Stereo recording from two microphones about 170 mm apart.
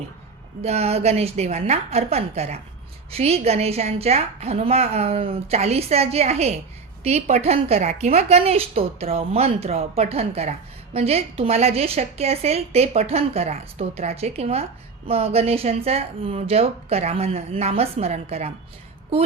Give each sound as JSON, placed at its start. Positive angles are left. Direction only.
{"t": 0.6, "sound": "a woman's voice", "side_deg": -40}